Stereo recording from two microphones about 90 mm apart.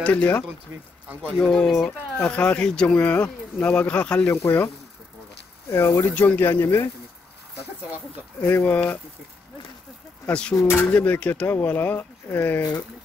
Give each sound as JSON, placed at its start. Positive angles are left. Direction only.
{"t": 0.0, "sound": "speech", "side_deg": 15}
{"t": 5.7, "sound": "speech", "side_deg": 30}
{"t": 8.4, "sound": "speech", "side_deg": 15}
{"t": 10.2, "sound": "speech", "side_deg": 10}
{"t": 10.7, "sound": "speech", "side_deg": 25}